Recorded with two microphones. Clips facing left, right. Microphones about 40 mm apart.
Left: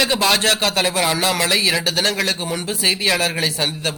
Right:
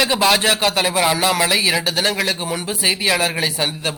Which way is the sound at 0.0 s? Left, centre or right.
Centre.